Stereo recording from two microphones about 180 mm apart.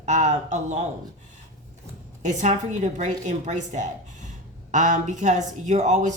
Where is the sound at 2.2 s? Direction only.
40° right (ahead or behind).